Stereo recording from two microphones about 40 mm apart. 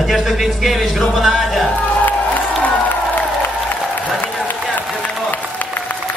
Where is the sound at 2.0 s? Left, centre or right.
Left.